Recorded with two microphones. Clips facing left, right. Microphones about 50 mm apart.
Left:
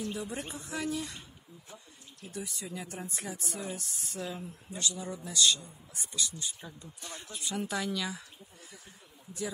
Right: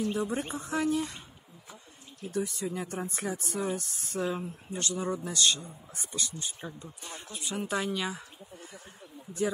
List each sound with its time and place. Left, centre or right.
0.1 s speech: right
2.3 s speech: right
4.2 s speech: right
6.8 s speech: right